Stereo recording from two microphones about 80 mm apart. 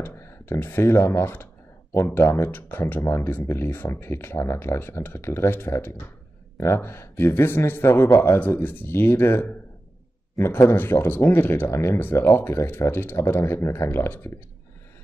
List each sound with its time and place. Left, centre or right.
0.0 s a man's voice: left